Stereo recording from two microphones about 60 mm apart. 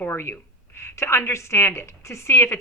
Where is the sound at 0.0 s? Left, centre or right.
Left.